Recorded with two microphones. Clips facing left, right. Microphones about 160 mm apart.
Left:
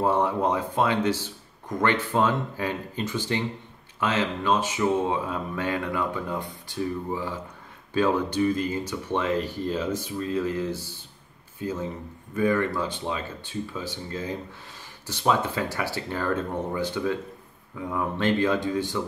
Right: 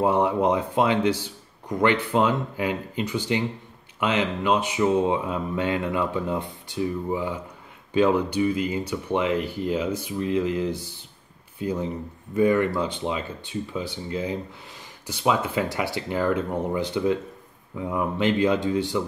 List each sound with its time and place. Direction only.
0.0 s speech: 15° right (ahead or behind)